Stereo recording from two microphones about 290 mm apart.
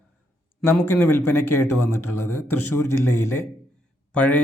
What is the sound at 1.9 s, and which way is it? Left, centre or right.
Speech, left.